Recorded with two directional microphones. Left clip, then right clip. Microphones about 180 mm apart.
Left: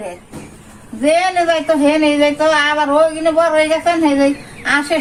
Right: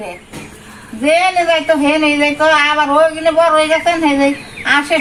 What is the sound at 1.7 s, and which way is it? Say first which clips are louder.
Speech: right 1 dB; 30° left (ahead or behind).